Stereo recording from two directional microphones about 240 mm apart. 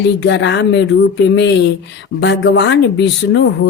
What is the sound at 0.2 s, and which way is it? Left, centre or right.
Speech, left.